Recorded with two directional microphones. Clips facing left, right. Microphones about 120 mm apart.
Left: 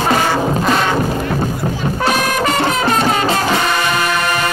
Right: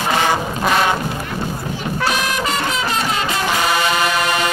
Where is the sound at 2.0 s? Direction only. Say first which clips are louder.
Left 5 dB; 45° left (ahead or behind).